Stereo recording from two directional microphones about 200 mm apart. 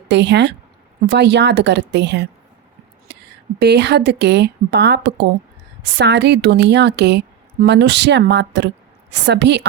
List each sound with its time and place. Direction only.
0.1 s a woman's voice: 60° right (ahead or behind)
3.1 s a sound: 60° right (ahead or behind)
3.6 s a woman's voice: 55° right (ahead or behind)